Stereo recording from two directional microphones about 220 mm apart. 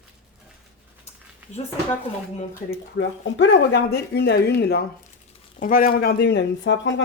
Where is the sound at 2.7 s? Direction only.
55° left (ahead or behind).